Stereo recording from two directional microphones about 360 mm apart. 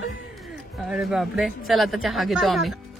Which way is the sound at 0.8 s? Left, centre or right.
Centre.